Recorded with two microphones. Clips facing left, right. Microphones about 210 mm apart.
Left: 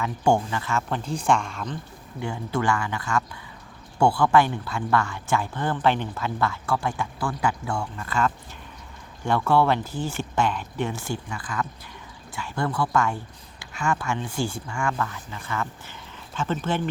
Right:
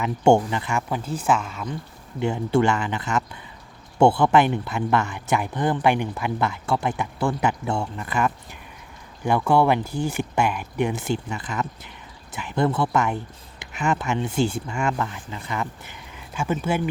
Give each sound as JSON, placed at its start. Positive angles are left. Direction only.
{"t": 0.0, "sound": "speech", "side_deg": -20}
{"t": 2.2, "sound": "speech", "side_deg": -25}